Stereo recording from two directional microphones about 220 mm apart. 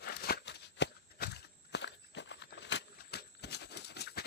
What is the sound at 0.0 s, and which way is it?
Walk, 45° left (ahead or behind).